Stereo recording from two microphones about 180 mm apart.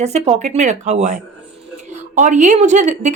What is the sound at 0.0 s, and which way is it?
Speech, 35° right (ahead or behind).